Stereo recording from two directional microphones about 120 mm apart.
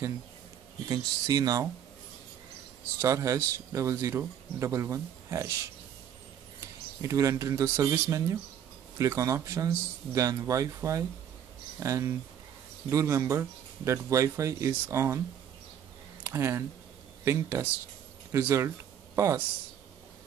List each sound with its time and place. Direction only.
0.8 s speech: 30° right (ahead or behind)
3.0 s speech: 25° right (ahead or behind)
7.0 s speech: 25° right (ahead or behind)
16.3 s speech: 20° right (ahead or behind)